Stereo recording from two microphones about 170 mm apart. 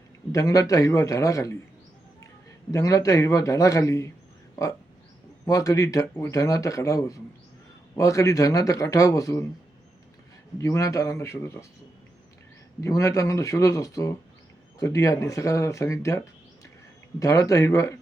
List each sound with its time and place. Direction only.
0.3 s a man's voice: 20° left (ahead or behind)
2.7 s a man's voice: 20° left (ahead or behind)
5.5 s a man's voice: 20° left (ahead or behind)
10.6 s speech: 20° left (ahead or behind)
12.8 s a man's voice: 20° left (ahead or behind)